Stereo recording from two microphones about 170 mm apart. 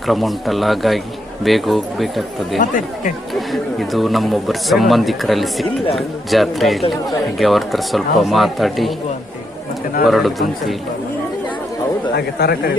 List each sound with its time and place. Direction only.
0.1 s speech: centre (ahead or behind)
2.6 s speech: 50° left (ahead or behind)
3.5 s speech: centre (ahead or behind)
10.1 s speech: centre (ahead or behind)
12.1 s speech: 70° left (ahead or behind)